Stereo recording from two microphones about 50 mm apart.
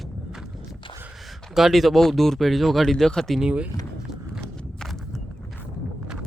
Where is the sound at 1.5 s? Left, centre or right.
Centre.